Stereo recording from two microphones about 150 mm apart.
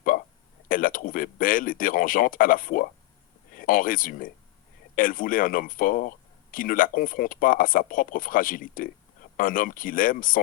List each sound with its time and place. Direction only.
0.7 s speech: 65° left (ahead or behind)